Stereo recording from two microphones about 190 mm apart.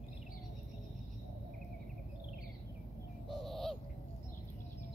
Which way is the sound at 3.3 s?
Centre (ahead or behind).